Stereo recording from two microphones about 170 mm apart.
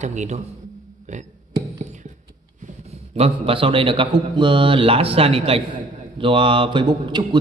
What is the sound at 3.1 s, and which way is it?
A man's voice, 35° right (ahead or behind).